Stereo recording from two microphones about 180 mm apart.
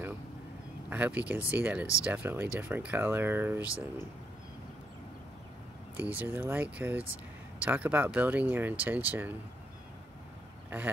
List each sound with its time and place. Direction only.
0.8 s speech: 10° right (ahead or behind)
5.9 s speech: 10° right (ahead or behind)
10.7 s speech: 10° right (ahead or behind)